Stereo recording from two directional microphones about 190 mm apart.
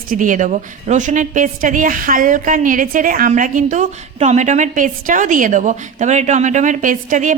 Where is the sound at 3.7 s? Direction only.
40° right (ahead or behind).